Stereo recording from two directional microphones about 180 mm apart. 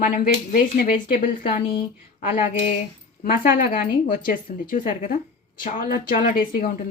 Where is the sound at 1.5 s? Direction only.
30° left (ahead or behind).